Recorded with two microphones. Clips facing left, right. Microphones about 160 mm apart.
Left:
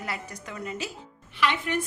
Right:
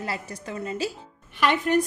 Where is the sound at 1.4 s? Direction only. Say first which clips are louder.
Right 5 dB; 45° right (ahead or behind).